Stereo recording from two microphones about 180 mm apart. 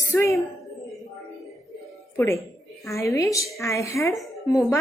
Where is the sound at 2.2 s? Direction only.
15° left (ahead or behind).